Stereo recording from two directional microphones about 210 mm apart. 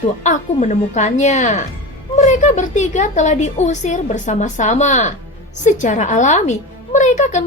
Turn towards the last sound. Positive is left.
turn(degrees=35)  # may be behind; listen again after turning